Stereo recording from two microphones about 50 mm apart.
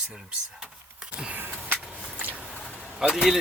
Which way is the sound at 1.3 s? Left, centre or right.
Right.